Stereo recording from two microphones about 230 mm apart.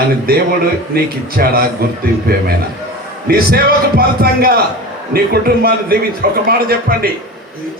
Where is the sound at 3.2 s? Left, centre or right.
Right.